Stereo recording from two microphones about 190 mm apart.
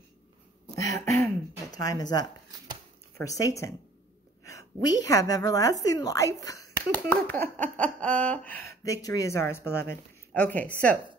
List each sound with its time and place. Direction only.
0.7 s a sound: 15° left (ahead or behind)
3.2 s a woman's voice: 20° left (ahead or behind)
8.8 s speech: 20° left (ahead or behind)